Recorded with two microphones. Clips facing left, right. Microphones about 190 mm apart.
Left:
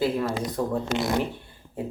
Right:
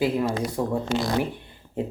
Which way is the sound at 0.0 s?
15° right (ahead or behind).